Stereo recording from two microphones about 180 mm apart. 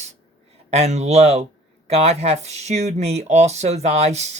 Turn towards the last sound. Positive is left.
turn(degrees=-40)  # may be behind; listen again after turning